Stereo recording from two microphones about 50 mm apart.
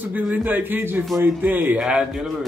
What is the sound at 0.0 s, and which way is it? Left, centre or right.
Speech, right.